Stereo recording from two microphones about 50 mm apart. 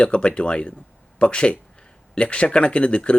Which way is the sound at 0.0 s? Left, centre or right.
Left.